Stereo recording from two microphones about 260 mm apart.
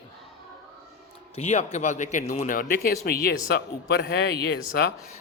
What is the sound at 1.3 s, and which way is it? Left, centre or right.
Speech, left.